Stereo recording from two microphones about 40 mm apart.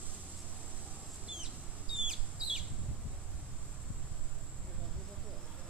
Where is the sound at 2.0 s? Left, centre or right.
Centre.